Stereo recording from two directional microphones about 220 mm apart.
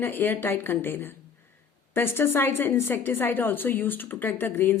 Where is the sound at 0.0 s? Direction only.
10° left (ahead or behind).